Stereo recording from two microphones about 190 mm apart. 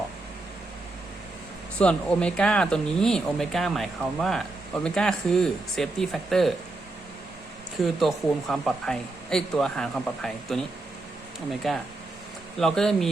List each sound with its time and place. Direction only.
1.8 s speech: 5° left (ahead or behind)
7.9 s speech: centre (ahead or behind)
11.6 s speech: centre (ahead or behind)